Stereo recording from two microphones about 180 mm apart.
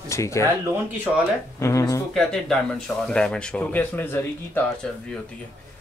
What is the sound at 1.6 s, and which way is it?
Speech, 15° left (ahead or behind).